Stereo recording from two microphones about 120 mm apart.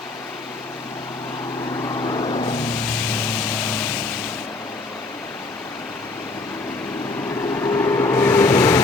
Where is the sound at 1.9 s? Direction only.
40° left (ahead or behind).